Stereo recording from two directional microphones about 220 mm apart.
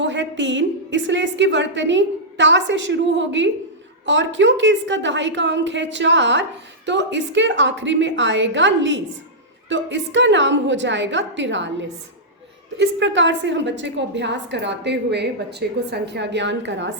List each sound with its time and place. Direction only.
0.0 s a woman's voice: 55° right (ahead or behind)